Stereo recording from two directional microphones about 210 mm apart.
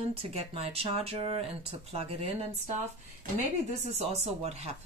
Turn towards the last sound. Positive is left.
turn(degrees=-30)  # may be behind; listen again after turning